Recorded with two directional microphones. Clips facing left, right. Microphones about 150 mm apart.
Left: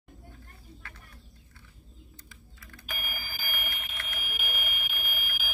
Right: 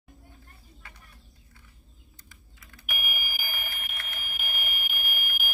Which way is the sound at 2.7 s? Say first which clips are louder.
Right 3 dB; 15° right (ahead or behind).